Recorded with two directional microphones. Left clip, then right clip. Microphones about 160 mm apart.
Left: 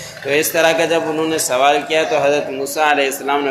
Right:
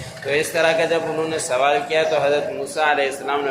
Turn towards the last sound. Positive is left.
turn(degrees=30)  # may be behind; listen again after turning